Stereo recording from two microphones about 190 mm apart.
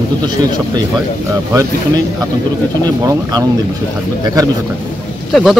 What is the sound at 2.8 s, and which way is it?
Speech, 20° right (ahead or behind).